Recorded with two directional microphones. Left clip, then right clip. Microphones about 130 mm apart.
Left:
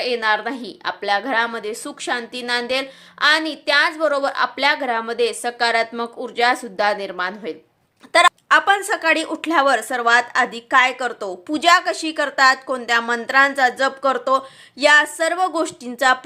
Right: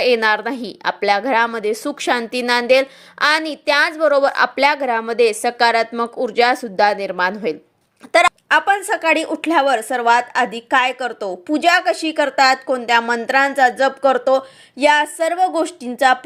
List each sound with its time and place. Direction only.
0.0 s a woman's voice: 55° right (ahead or behind)
8.1 s speech: 30° right (ahead or behind)
8.4 s a woman's voice: 15° right (ahead or behind)